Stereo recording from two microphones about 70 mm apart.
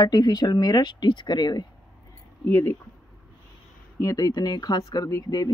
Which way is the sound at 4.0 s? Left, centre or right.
Left.